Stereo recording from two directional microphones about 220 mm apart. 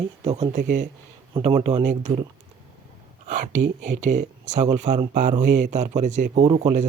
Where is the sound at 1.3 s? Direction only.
25° right (ahead or behind).